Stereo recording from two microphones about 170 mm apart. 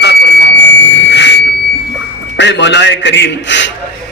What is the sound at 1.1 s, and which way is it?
Smoke detector, 90° left.